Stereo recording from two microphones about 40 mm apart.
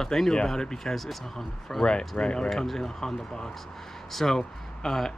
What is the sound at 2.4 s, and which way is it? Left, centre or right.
Speech, centre.